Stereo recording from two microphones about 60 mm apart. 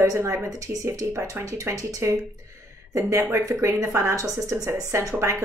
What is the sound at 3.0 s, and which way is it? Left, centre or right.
Speech, right.